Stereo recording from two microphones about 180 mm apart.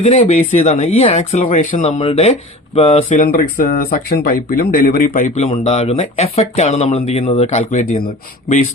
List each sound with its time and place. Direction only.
0.0 s speech: 35° left (ahead or behind)